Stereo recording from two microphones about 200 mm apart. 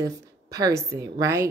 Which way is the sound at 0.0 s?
15° right (ahead or behind).